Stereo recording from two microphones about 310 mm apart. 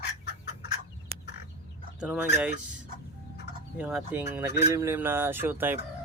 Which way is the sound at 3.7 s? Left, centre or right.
Centre.